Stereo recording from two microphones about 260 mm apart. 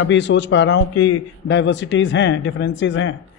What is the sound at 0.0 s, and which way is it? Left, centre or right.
A man's voice, left.